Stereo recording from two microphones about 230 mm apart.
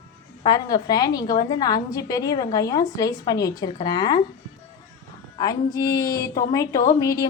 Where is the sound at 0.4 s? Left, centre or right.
Centre.